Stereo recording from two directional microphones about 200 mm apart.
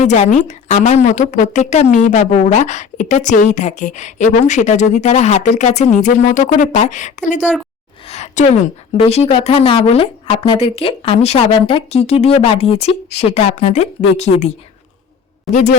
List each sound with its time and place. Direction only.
0.0 s a woman's voice: 35° left (ahead or behind)